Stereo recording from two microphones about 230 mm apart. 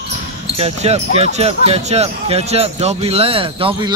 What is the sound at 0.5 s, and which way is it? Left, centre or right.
Speech, right.